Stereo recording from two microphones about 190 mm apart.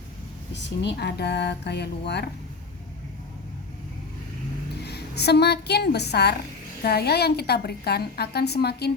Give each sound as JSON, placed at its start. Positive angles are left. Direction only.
{"t": 0.5, "sound": "a woman's voice", "side_deg": 65}
{"t": 4.9, "sound": "a woman's voice", "side_deg": 60}